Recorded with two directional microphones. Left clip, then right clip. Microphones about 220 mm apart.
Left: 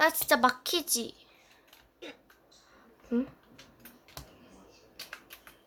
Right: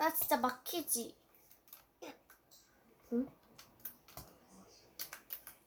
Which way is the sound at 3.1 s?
25° left (ahead or behind).